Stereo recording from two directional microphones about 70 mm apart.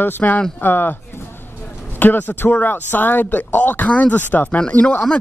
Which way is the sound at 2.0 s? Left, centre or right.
Left.